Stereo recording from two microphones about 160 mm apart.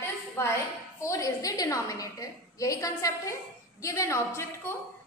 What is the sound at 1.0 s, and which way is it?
A woman's voice, 20° left (ahead or behind).